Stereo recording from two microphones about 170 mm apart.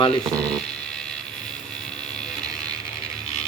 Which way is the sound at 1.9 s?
5° left (ahead or behind).